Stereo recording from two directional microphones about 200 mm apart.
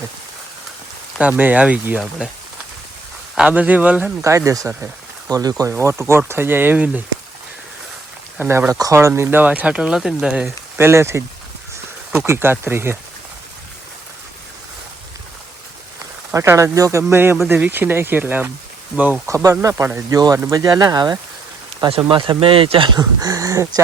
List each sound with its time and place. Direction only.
1.2 s speech: 5° right (ahead or behind)
3.3 s speech: 5° right (ahead or behind)
8.4 s speech: 10° right (ahead or behind)
16.3 s speech: 15° right (ahead or behind)